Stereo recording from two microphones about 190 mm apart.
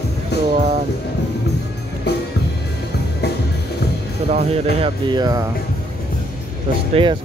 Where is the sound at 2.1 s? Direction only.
60° left (ahead or behind).